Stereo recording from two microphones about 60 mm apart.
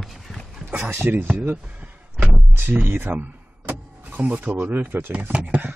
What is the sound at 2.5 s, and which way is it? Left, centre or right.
Speech, right.